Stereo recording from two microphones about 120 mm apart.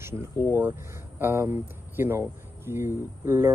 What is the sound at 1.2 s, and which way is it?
Speech, 20° right (ahead or behind).